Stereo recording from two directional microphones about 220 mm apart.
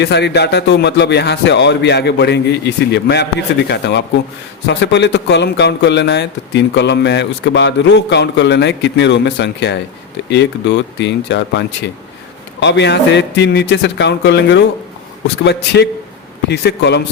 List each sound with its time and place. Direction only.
0.0 s speech: 50° left (ahead or behind)